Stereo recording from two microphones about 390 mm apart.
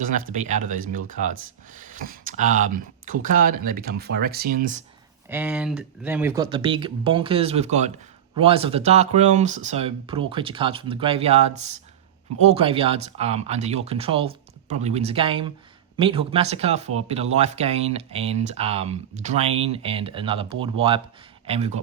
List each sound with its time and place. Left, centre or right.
0.1 s speech: centre
5.3 s speech: centre